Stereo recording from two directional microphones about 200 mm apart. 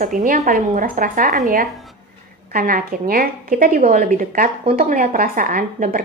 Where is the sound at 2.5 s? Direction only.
45° right (ahead or behind).